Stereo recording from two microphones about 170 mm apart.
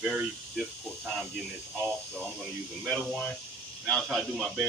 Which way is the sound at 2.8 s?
5° left (ahead or behind).